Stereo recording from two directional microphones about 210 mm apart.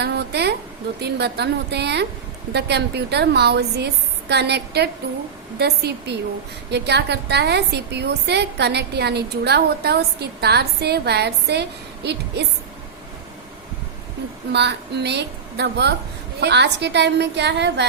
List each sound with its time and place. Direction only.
0.0 s a sound: 50° right (ahead or behind)
1.0 s a woman's voice: 50° right (ahead or behind)
14.5 s a woman's voice: 55° right (ahead or behind)